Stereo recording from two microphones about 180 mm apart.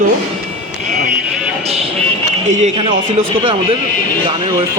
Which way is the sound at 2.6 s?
30° right (ahead or behind).